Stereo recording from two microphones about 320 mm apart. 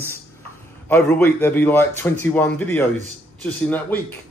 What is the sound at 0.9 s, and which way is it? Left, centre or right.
A man's voice, centre.